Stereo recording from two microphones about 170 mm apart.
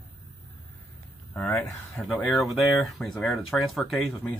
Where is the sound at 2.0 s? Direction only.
5° right (ahead or behind).